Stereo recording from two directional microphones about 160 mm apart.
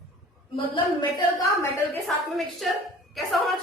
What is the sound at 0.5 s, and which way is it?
Speech, 30° left (ahead or behind).